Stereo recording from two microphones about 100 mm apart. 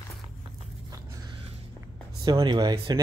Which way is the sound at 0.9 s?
35° right (ahead or behind).